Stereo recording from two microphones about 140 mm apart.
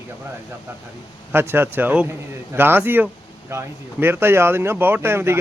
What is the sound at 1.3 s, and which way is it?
Speech, 15° right (ahead or behind).